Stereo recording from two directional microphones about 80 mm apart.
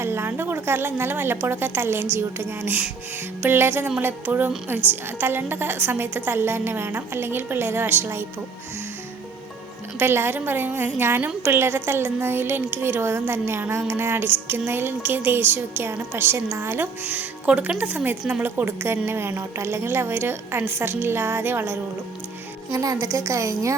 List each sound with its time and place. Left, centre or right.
0.0 s a woman's voice: right
10.0 s a woman's voice: right
18.2 s speech: centre
18.4 s a woman's voice: right
22.7 s a woman's voice: right